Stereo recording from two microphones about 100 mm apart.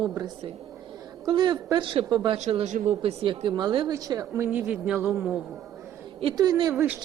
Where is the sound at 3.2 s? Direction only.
55° right (ahead or behind).